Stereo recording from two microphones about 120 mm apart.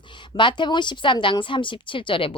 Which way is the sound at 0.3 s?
40° left (ahead or behind).